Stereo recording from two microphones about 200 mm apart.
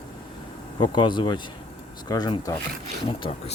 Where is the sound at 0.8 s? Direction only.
25° left (ahead or behind).